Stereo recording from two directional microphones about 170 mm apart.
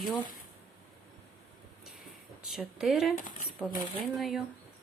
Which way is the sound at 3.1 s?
50° left (ahead or behind).